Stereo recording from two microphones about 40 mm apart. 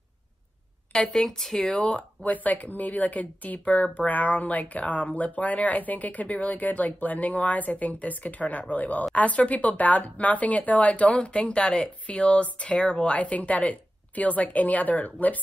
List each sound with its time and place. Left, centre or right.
1.1 s speech: centre
1.7 s speech: left
2.3 s speech: left